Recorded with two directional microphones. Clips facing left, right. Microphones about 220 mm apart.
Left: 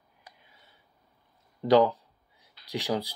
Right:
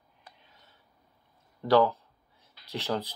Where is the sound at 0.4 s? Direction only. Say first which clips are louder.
Even; 10° left (ahead or behind).